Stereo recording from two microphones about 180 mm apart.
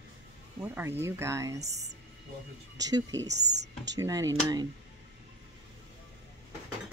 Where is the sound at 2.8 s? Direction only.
20° right (ahead or behind).